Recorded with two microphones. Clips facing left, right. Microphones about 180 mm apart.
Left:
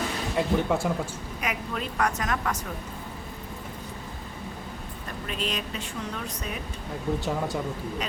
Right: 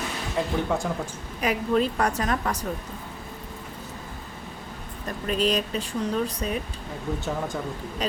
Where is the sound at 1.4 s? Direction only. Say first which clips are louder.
Right 9 dB; 30° right (ahead or behind).